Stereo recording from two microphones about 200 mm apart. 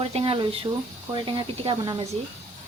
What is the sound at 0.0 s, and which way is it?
Speech, 30° right (ahead or behind).